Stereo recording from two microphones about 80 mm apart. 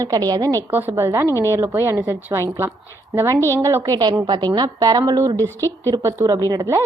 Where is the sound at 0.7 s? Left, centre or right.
Right.